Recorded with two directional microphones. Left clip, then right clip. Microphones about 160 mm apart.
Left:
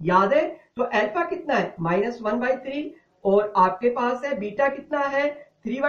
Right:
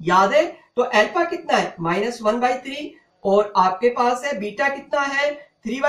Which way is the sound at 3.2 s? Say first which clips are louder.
Right 2 dB; 15° left (ahead or behind).